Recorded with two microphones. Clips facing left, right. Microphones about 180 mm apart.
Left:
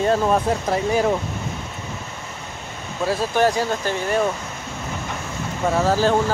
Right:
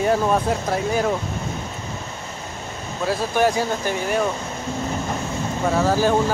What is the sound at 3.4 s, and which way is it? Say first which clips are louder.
Speech: even; 10° right (ahead or behind).